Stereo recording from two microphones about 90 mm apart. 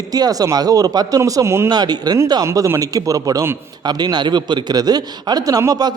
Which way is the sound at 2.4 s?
40° right (ahead or behind).